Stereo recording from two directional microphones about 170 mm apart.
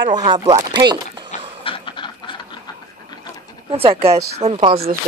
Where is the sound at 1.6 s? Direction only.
30° left (ahead or behind).